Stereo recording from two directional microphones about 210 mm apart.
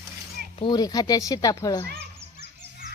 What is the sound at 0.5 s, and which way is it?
A woman's voice, 20° left (ahead or behind).